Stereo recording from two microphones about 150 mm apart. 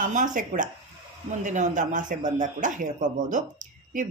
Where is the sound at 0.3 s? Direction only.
60° right (ahead or behind).